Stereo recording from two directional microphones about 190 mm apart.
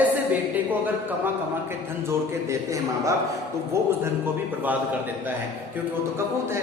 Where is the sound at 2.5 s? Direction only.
15° right (ahead or behind).